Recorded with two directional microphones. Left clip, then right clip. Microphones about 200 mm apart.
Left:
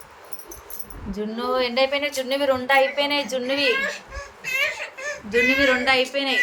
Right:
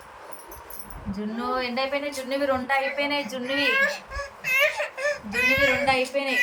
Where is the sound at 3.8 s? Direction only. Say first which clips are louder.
Right 3 dB; 25° right (ahead or behind).